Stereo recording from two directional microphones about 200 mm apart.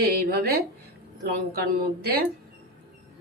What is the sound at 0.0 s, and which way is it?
Speech, 50° right (ahead or behind).